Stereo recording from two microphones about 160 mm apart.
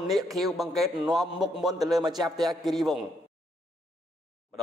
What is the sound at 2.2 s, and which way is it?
Speech, centre (ahead or behind).